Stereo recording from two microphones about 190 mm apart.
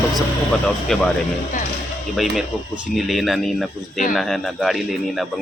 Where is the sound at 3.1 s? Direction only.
Centre (ahead or behind).